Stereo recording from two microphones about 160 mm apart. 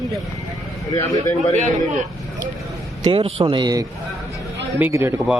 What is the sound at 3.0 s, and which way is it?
A man's voice, 35° right (ahead or behind).